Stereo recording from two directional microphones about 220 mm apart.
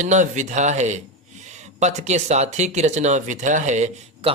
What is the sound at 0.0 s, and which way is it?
Speech, 35° right (ahead or behind).